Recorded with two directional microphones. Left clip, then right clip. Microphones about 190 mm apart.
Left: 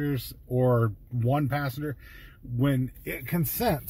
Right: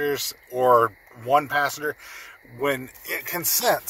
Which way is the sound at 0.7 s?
30° right (ahead or behind).